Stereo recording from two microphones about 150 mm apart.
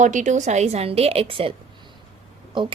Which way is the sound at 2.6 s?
30° right (ahead or behind).